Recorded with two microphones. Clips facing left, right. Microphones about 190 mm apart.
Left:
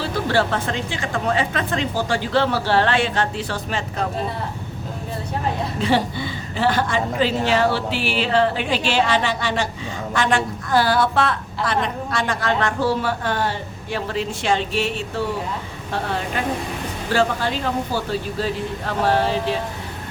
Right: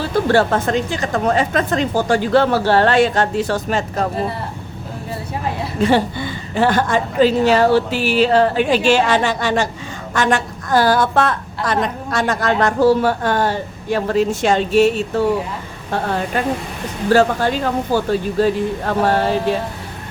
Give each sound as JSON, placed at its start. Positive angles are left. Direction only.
{"t": 0.0, "sound": "a woman's voice", "side_deg": -45}
{"t": 5.8, "sound": "a woman's voice", "side_deg": -50}
{"t": 17.1, "sound": "a woman's voice", "side_deg": -45}